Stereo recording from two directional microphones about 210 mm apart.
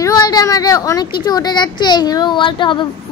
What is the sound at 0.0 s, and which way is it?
A child's voice, 20° left (ahead or behind).